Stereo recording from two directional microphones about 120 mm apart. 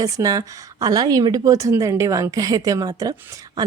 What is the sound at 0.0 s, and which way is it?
A woman's voice, 30° right (ahead or behind).